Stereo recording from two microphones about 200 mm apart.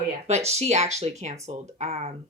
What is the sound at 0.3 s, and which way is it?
Speech, 35° right (ahead or behind).